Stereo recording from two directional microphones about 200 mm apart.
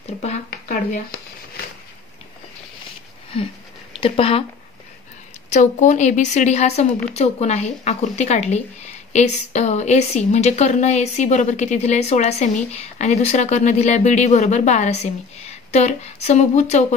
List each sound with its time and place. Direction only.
4.0 s speech: 30° left (ahead or behind)
5.5 s a woman's voice: 40° left (ahead or behind)